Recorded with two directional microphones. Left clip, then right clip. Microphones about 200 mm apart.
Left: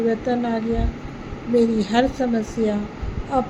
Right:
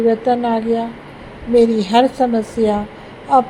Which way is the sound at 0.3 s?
15° right (ahead or behind).